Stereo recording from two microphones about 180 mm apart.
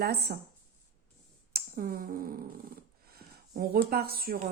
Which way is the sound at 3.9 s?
60° right (ahead or behind).